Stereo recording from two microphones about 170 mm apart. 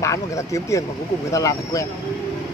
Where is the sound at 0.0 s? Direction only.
20° left (ahead or behind).